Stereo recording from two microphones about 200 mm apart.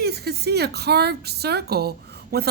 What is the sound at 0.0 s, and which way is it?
A woman's voice, 55° right (ahead or behind).